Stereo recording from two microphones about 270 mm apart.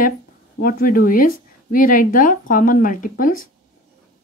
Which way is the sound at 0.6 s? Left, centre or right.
Left.